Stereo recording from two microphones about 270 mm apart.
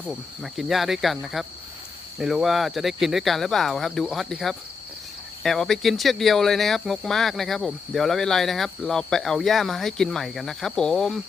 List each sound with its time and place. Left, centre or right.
0.1 s speech: centre